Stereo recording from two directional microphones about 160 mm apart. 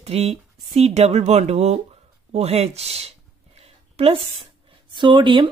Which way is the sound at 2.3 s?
40° right (ahead or behind).